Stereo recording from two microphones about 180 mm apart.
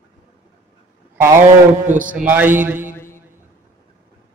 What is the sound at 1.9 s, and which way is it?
Speech, 45° right (ahead or behind).